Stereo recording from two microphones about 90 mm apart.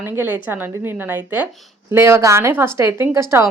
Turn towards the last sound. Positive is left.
turn(degrees=-30)  # may be behind; listen again after turning